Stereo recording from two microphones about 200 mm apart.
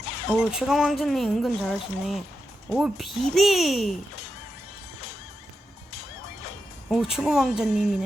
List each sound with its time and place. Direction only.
0.3 s speech: 5° right (ahead or behind)
6.9 s speech: centre (ahead or behind)